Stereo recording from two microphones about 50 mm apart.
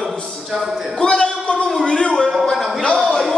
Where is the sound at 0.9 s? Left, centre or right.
Centre.